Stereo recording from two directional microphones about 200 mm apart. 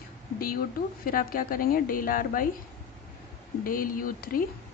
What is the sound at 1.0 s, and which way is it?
A woman's voice, 45° left (ahead or behind).